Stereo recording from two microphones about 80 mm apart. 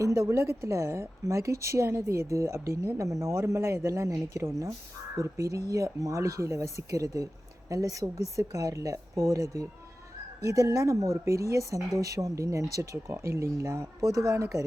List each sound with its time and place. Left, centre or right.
0.0 s a woman's voice: right